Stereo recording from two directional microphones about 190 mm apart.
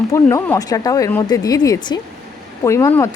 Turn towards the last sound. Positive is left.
turn(degrees=15)  # may be behind; listen again after turning